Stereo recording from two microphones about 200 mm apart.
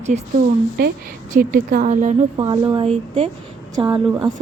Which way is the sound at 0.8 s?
50° right (ahead or behind).